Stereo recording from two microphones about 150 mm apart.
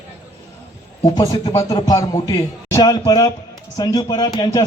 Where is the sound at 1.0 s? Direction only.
25° left (ahead or behind).